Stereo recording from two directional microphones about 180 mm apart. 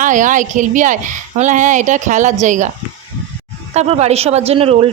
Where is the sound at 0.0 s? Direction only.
45° right (ahead or behind).